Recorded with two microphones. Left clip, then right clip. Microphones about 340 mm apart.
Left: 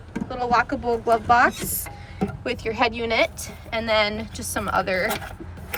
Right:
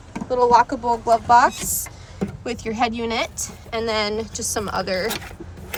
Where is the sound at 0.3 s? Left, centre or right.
Centre.